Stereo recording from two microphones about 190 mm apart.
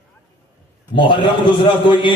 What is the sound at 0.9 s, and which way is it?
A man's voice, 25° left (ahead or behind).